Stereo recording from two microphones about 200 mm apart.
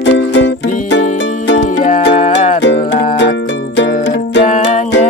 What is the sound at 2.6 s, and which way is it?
Music, 65° left (ahead or behind).